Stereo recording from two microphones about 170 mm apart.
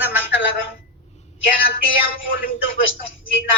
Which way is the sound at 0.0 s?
10° right (ahead or behind).